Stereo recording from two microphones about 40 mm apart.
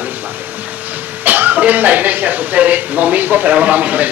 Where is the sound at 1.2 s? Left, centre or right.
Right.